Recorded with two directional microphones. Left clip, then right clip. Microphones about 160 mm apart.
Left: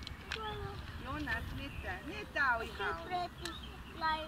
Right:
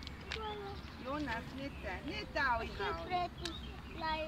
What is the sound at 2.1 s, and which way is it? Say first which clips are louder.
Speech: left 2 dB; 10° left (ahead or behind).